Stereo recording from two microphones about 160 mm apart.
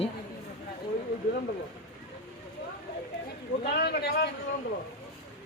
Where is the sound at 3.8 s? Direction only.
90° left.